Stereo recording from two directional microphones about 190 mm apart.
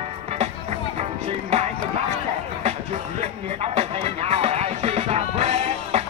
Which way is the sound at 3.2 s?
35° right (ahead or behind).